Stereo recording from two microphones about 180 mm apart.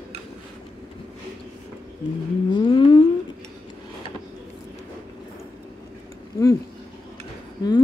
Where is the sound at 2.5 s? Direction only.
25° left (ahead or behind).